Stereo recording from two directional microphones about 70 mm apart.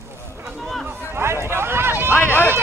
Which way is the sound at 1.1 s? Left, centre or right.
Right.